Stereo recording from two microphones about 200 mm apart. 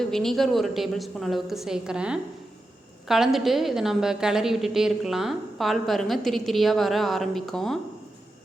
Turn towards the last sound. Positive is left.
turn(degrees=0)  # may be behind; listen again after turning